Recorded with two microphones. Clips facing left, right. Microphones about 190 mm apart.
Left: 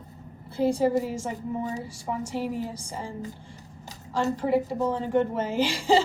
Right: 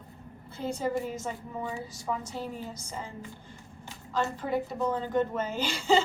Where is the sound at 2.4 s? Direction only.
80° left.